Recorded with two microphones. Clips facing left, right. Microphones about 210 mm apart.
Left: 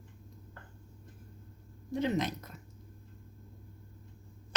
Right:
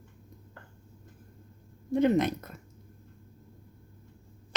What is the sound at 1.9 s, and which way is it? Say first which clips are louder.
Speech: right 7 dB; 55° right (ahead or behind).